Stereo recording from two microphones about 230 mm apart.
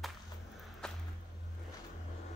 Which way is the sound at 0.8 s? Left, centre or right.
Centre.